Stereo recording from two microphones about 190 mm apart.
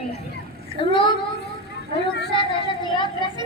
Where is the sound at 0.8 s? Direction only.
25° left (ahead or behind).